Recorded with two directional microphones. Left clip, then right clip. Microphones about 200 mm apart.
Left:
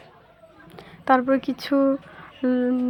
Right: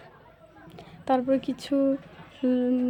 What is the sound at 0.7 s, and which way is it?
A woman's voice, 10° left (ahead or behind).